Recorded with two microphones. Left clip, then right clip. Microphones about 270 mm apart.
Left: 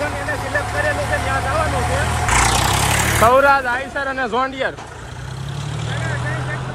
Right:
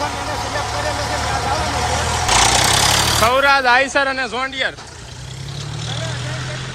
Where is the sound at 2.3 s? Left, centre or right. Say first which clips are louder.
Right 3 dB; right.